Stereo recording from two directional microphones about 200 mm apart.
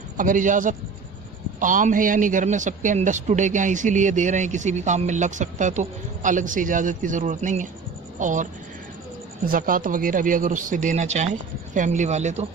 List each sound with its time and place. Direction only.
0.2 s a man's voice: 40° right (ahead or behind)
9.5 s a man's voice: 45° right (ahead or behind)